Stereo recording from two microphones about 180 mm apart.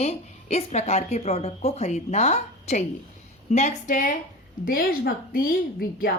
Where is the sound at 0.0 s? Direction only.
35° left (ahead or behind).